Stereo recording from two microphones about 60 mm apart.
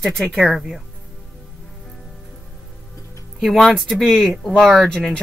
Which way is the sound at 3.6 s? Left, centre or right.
Centre.